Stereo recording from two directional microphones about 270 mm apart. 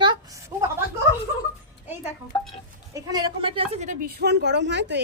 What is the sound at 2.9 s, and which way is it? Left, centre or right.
A woman's voice, centre.